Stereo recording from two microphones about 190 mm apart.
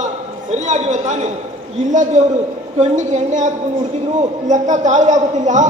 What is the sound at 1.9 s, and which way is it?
A man's voice, 40° right (ahead or behind).